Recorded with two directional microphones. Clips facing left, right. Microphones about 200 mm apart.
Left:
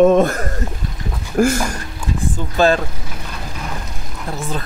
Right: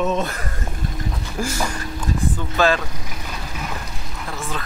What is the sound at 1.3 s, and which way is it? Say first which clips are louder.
Speech: left 12 dB; 55° left (ahead or behind).